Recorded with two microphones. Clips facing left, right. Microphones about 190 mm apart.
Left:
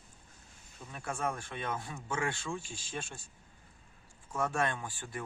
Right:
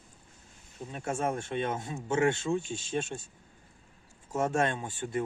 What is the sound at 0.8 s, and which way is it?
Speech, 25° right (ahead or behind).